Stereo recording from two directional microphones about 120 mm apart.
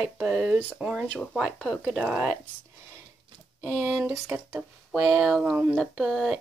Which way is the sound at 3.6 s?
15° right (ahead or behind).